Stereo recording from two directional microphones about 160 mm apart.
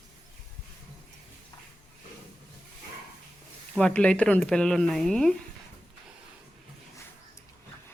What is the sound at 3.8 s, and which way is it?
A woman's voice, 5° left (ahead or behind).